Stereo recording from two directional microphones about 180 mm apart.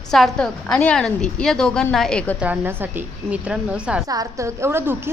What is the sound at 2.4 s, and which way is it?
A woman's voice, 10° right (ahead or behind).